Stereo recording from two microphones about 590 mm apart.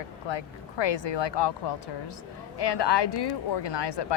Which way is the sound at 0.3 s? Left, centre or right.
Left.